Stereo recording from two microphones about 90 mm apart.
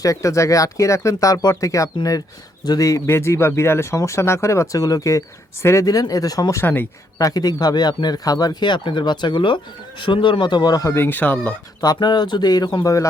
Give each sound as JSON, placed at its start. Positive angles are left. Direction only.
{"t": 0.0, "sound": "speech", "side_deg": 40}
{"t": 6.6, "sound": "speech", "side_deg": 20}
{"t": 7.2, "sound": "speech", "side_deg": 45}
{"t": 10.9, "sound": "speech", "side_deg": 25}
{"t": 11.8, "sound": "speech", "side_deg": 50}